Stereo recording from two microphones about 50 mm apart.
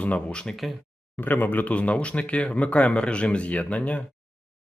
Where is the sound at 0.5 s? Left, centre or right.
Centre.